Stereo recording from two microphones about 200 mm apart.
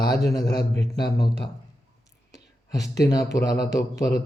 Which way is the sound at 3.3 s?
15° left (ahead or behind).